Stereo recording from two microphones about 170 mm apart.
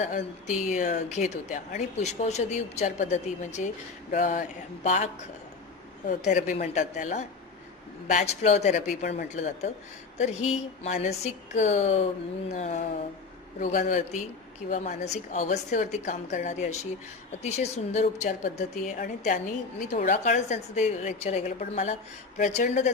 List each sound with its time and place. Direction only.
0.0 s a woman's voice: 45° left (ahead or behind)
6.1 s a woman's voice: 50° left (ahead or behind)
10.8 s a woman's voice: 40° left (ahead or behind)